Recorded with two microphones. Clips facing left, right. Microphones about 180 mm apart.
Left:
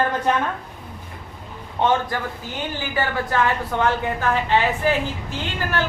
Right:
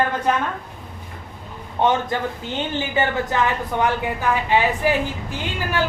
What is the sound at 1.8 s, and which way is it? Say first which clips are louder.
Speech: right 1 dB; 25° right (ahead or behind).